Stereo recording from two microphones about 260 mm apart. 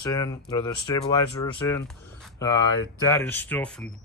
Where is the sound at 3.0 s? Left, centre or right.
Centre.